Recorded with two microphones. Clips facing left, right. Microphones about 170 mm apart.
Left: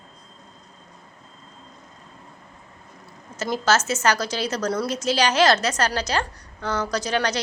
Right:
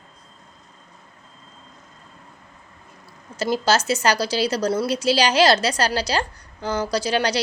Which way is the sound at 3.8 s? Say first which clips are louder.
Right 3 dB; 15° right (ahead or behind).